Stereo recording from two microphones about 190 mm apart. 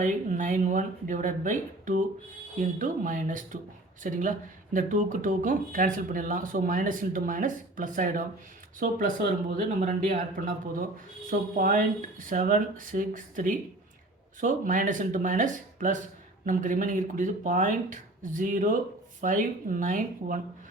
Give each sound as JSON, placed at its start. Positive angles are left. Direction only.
{"t": 0.0, "sound": "speech", "side_deg": -40}